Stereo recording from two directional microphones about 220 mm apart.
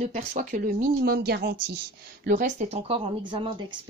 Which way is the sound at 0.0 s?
35° right (ahead or behind).